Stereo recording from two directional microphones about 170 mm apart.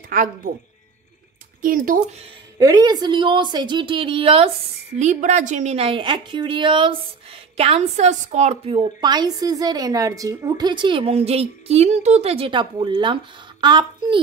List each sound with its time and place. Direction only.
0.1 s speech: 55° right (ahead or behind)
1.6 s speech: 55° right (ahead or behind)
2.6 s a woman's voice: 20° right (ahead or behind)
4.9 s a woman's voice: 45° right (ahead or behind); by 14.2 s 25° right (ahead or behind)